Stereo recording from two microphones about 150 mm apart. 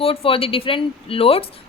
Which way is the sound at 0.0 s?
40° left (ahead or behind).